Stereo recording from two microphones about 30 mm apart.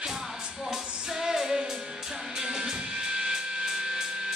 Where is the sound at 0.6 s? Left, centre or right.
Centre.